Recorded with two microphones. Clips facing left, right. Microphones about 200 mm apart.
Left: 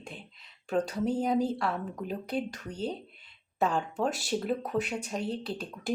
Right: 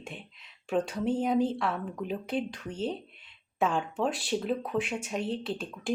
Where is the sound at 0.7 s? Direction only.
Centre (ahead or behind).